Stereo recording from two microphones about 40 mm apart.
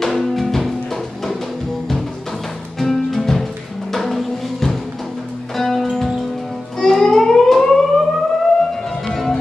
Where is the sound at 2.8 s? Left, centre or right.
Centre.